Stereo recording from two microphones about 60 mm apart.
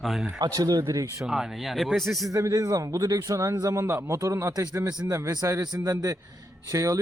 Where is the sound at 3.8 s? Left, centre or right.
Right.